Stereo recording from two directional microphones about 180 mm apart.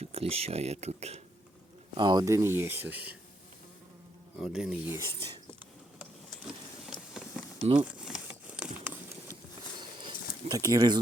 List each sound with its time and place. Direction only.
0.0 s speech: 35° right (ahead or behind)
2.0 s speech: 25° right (ahead or behind); by 3.2 s 10° right (ahead or behind)
4.4 s speech: 5° right (ahead or behind)
7.1 s vehicle: centre (ahead or behind)
7.9 s a sound: 5° right (ahead or behind)
10.0 s a sound: 25° right (ahead or behind)